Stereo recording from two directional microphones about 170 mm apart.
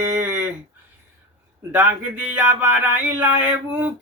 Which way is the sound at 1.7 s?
10° right (ahead or behind).